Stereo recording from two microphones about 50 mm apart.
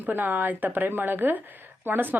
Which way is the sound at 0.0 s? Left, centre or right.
Right.